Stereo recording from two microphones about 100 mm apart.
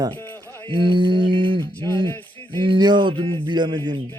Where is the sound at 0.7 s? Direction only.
55° right (ahead or behind).